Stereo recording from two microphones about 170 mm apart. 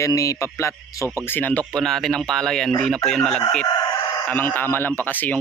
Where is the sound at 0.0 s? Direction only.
20° left (ahead or behind).